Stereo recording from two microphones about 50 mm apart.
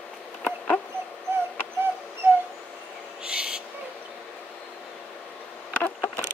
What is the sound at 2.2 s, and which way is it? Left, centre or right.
Dog, right.